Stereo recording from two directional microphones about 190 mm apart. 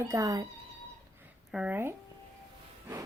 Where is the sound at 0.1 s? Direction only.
15° right (ahead or behind).